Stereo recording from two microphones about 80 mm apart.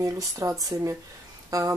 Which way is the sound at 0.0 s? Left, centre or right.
Right.